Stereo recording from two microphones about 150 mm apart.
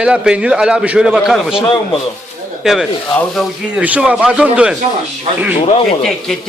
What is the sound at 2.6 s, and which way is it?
Speech, centre (ahead or behind).